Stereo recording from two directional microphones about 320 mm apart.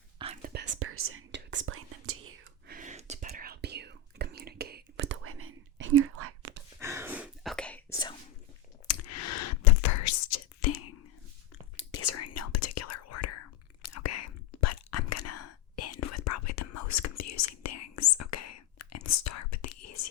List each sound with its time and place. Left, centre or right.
0.2 s whispering: centre
0.5 s whispering: right
2.7 s whispering: right
6.7 s whispering: centre
8.9 s whispering: left